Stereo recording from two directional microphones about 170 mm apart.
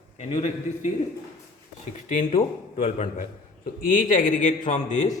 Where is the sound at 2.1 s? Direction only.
45° left (ahead or behind).